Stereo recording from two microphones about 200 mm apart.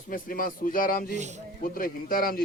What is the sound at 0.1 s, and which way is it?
Speech, 45° left (ahead or behind).